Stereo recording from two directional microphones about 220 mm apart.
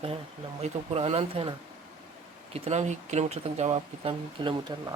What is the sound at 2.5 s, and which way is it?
Speech, 30° right (ahead or behind).